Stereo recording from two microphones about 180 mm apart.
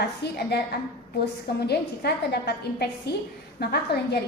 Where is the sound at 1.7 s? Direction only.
65° left (ahead or behind).